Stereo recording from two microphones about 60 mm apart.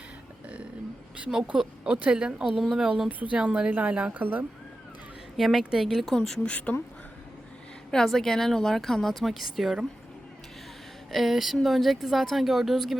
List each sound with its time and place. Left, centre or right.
1.5 s speech: centre
2.4 s speech: centre; by 4.4 s right
5.4 s speech: centre
6.5 s speech: left
7.9 s speech: centre
11.1 s speech: centre